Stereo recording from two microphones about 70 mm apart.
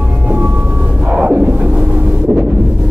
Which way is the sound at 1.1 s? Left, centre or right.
Centre.